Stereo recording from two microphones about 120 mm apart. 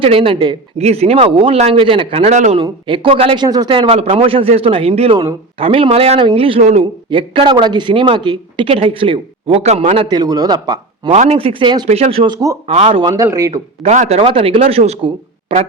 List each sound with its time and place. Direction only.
0.0 s speech: 50° right (ahead or behind)
2.8 s speech: 45° right (ahead or behind)
3.7 s speech: 45° right (ahead or behind); by 6.8 s 65° right (ahead or behind)
7.1 s speech: 45° right (ahead or behind)
10.1 s a man's voice: 35° right (ahead or behind)
11.1 s speech: 60° right (ahead or behind); by 11.9 s 40° right (ahead or behind)
11.9 s speech: 60° right (ahead or behind)
12.6 s speech: 60° right (ahead or behind)
13.1 s a man's voice: 25° right (ahead or behind)
13.8 s a man's voice: 80° right
14.2 s speech: 50° right (ahead or behind)